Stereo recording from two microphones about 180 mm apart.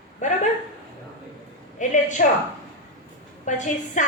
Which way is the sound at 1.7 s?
45° left (ahead or behind).